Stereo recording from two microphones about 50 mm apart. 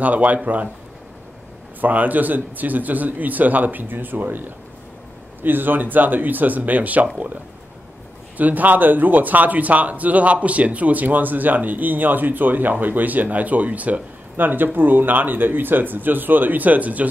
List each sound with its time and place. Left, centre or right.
0.0 s speech: right
1.8 s speech: right
8.4 s speech: right